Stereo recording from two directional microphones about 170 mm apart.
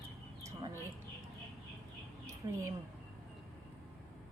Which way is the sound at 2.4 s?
20° right (ahead or behind).